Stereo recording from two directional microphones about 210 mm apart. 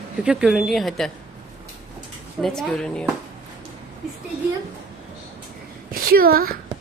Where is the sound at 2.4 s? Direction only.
5° left (ahead or behind).